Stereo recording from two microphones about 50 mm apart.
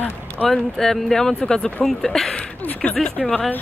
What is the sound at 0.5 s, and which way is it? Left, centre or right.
Speech, centre.